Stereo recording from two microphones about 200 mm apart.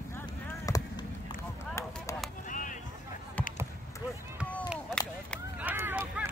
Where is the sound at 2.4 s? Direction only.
40° left (ahead or behind).